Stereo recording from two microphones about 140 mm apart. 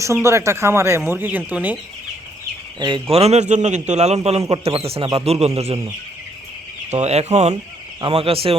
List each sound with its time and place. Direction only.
0.0 s speech: 20° right (ahead or behind)
2.7 s speech: 30° right (ahead or behind)
3.1 s a man's voice: 50° right (ahead or behind)
6.9 s a man's voice: 50° right (ahead or behind)
8.0 s a man's voice: 40° right (ahead or behind)